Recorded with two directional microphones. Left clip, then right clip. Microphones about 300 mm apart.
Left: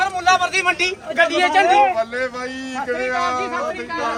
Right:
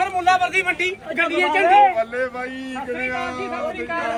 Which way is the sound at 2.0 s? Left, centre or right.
Left.